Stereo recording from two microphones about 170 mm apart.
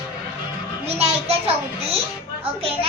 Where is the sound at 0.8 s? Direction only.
35° right (ahead or behind).